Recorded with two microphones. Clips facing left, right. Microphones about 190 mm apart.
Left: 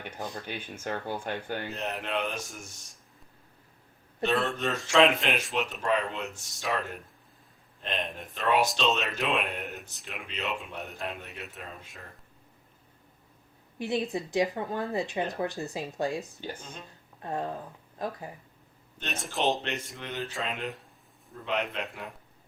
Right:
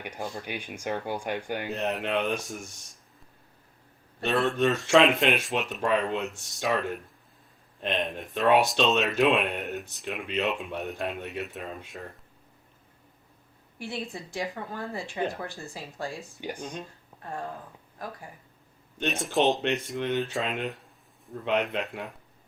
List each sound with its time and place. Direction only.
0.0 s speech: 15° right (ahead or behind)
2.0 s speech: centre (ahead or behind)
4.3 s speech: centre (ahead or behind)
13.7 s speech: 20° left (ahead or behind)
16.4 s speech: 15° right (ahead or behind)
17.2 s speech: 20° left (ahead or behind)
19.0 s speech: centre (ahead or behind)